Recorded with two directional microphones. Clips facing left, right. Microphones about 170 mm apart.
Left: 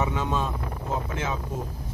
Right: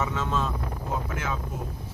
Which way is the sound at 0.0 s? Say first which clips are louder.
Left 1 dB; 15° left (ahead or behind).